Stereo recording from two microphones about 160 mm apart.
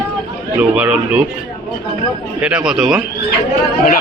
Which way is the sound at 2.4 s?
5° right (ahead or behind).